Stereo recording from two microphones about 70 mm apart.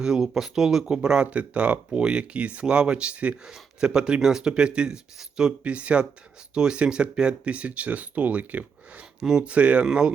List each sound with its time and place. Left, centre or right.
0.0 s speech: centre